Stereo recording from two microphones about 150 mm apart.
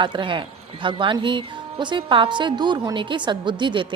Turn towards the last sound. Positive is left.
turn(degrees=-30)  # may be behind; listen again after turning